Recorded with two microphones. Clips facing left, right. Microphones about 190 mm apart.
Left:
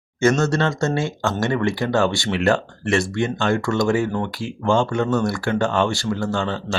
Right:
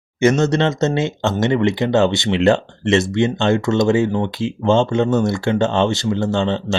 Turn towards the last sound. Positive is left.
turn(degrees=-25)  # may be behind; listen again after turning